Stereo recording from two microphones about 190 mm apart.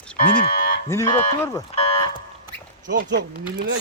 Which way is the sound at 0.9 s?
15° left (ahead or behind).